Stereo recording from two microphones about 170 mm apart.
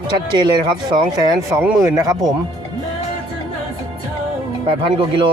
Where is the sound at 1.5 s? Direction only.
15° right (ahead or behind).